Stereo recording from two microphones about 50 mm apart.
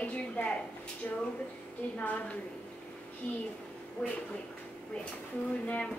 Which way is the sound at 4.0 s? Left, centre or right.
Left.